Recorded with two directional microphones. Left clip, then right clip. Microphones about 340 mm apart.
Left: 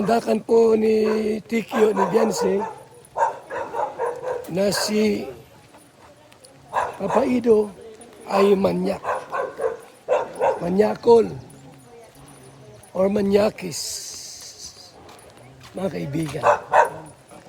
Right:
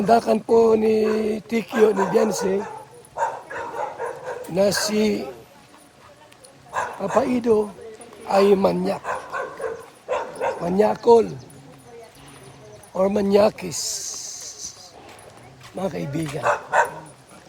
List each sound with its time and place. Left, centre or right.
0.0 s speech: centre
1.0 s speech: right
1.5 s speech: centre
2.2 s speech: centre
3.2 s dog: left
4.5 s speech: centre
6.7 s bow-wow: left
7.3 s speech: centre
9.0 s dog: left
10.8 s speech: centre
12.9 s speech: centre
14.1 s music: centre
15.7 s speech: centre
16.4 s speech: left